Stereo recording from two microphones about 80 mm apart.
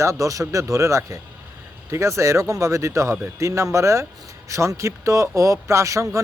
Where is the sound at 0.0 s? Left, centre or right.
Right.